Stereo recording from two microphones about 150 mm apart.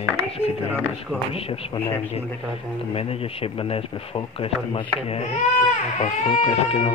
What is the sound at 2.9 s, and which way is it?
Speech, 40° left (ahead or behind).